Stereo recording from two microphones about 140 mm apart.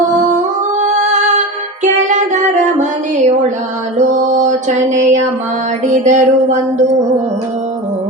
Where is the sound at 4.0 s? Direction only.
60° right (ahead or behind).